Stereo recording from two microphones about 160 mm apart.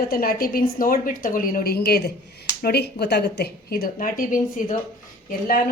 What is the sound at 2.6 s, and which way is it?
Speech, 90° left.